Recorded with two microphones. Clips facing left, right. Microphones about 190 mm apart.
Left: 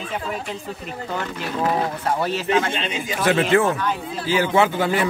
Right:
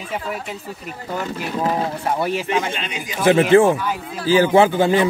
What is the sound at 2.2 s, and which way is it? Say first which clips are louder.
Speech: left 3 dB; 15° right (ahead or behind).